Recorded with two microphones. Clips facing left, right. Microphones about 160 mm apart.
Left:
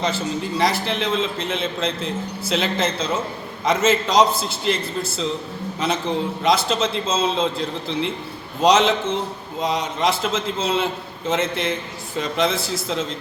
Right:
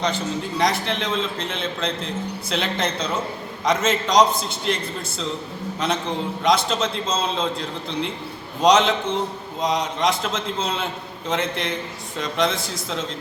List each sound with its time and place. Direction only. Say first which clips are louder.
0.6 s a man's voice: left 1 dB; 5° left (ahead or behind)